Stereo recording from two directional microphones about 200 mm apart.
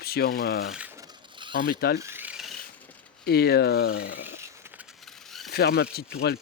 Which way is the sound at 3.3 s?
50° left (ahead or behind).